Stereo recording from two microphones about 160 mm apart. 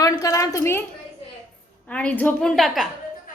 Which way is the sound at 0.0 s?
20° left (ahead or behind).